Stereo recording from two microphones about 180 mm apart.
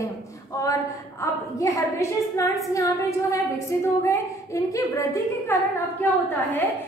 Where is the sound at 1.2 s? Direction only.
15° left (ahead or behind).